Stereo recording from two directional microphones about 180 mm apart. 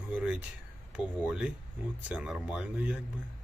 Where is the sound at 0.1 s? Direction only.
5° right (ahead or behind).